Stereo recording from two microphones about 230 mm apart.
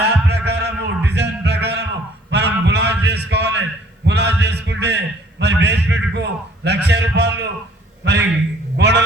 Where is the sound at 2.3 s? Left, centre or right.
Right.